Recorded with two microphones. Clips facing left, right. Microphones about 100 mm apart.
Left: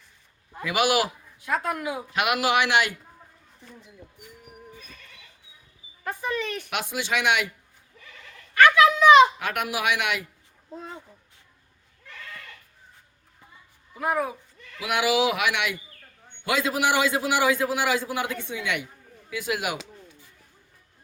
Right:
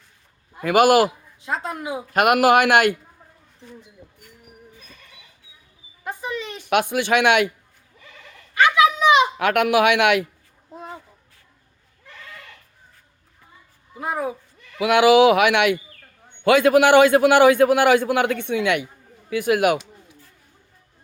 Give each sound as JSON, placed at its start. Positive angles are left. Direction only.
{"t": 0.6, "sound": "speech", "side_deg": -50}
{"t": 1.4, "sound": "speech", "side_deg": -25}
{"t": 2.1, "sound": "speech", "side_deg": -50}
{"t": 6.1, "sound": "speech", "side_deg": -20}
{"t": 6.7, "sound": "a man's voice", "side_deg": -60}
{"t": 8.5, "sound": "a sound", "side_deg": -15}
{"t": 9.4, "sound": "a man's voice", "side_deg": -65}
{"t": 14.0, "sound": "speech", "side_deg": -25}
{"t": 14.8, "sound": "a man's voice", "side_deg": -60}